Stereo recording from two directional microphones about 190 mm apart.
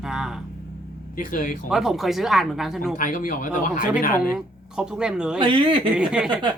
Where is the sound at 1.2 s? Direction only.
45° left (ahead or behind).